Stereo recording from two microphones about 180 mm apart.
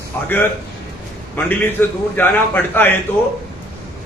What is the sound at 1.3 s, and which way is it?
A man's voice, 10° left (ahead or behind).